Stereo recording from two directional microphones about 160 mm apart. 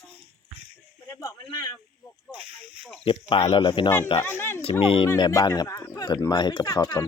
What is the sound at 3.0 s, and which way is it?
Speech, 30° left (ahead or behind).